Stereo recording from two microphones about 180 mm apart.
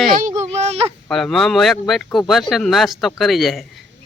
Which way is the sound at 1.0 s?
Centre (ahead or behind).